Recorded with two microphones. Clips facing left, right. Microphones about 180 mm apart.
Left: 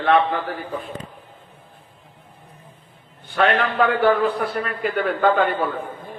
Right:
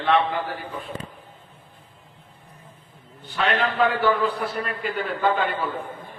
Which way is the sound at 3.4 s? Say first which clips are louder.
Left 3 dB; 60° left (ahead or behind).